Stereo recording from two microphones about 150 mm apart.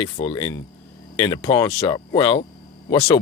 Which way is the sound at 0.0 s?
35° left (ahead or behind).